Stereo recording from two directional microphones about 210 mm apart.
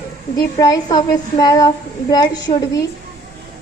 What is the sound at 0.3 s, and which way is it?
A woman's voice, 15° left (ahead or behind).